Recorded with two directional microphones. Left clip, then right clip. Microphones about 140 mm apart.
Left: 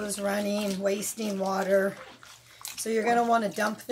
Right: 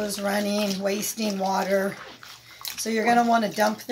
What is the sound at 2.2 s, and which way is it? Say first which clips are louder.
Dog: right 6 dB; 30° right (ahead or behind).